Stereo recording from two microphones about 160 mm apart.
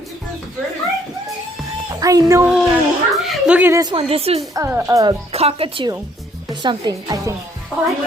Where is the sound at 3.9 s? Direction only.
40° right (ahead or behind).